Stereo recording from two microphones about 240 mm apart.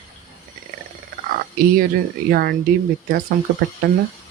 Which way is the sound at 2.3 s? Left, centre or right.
Right.